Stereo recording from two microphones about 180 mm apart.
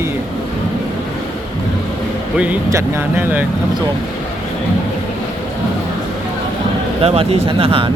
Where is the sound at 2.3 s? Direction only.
10° right (ahead or behind).